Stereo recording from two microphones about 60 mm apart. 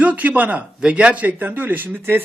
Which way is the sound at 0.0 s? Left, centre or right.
Right.